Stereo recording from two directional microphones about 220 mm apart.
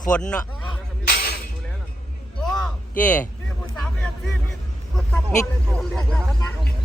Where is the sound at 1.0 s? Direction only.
45° left (ahead or behind).